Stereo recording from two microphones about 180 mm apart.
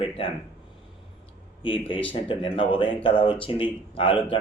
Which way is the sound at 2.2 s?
30° left (ahead or behind).